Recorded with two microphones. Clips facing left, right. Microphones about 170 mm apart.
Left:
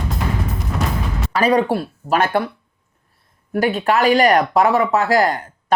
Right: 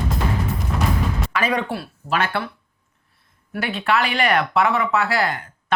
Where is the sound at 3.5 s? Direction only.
40° left (ahead or behind).